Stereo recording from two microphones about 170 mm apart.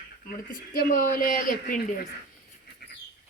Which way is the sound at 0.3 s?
60° left (ahead or behind).